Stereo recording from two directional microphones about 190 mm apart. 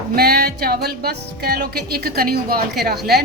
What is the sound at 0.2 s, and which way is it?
Speech, 55° right (ahead or behind).